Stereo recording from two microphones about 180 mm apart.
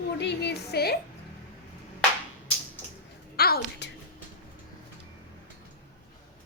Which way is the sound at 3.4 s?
60° left (ahead or behind).